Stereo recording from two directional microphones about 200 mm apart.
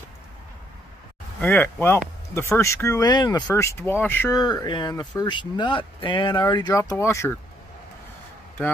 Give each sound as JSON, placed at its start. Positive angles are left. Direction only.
{"t": 1.4, "sound": "speech", "side_deg": 10}